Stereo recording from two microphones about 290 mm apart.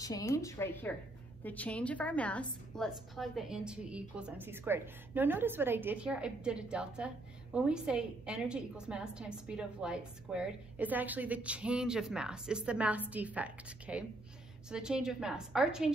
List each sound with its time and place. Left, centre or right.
0.0 s a woman's voice: centre